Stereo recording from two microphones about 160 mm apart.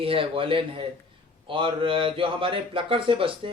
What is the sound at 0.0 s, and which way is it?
Speech, 35° right (ahead or behind).